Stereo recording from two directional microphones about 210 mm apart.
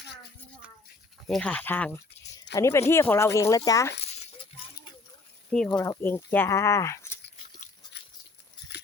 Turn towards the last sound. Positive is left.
turn(degrees=15)  # may be behind; listen again after turning